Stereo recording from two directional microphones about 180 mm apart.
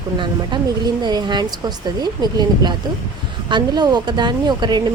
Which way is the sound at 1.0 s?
25° right (ahead or behind).